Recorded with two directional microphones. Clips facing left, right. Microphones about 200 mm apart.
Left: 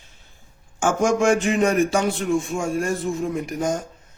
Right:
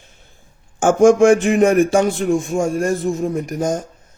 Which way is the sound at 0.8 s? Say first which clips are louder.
Right 9 dB; 50° right (ahead or behind).